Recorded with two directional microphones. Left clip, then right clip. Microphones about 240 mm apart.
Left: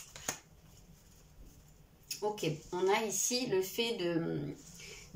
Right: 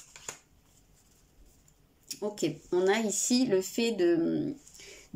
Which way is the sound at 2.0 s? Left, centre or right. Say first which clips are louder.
Right 3 dB; right.